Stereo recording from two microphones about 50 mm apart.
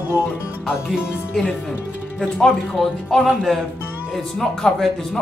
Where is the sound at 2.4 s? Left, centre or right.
Centre.